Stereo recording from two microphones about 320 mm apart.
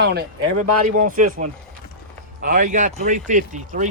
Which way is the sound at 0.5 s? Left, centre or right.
Right.